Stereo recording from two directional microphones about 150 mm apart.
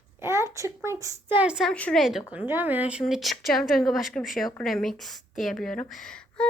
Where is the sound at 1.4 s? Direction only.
5° right (ahead or behind).